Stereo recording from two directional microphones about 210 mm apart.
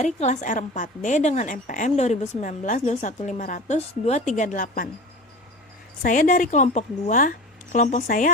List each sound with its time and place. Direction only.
0.0 s a woman's voice: 35° left (ahead or behind)
6.0 s a woman's voice: 40° left (ahead or behind)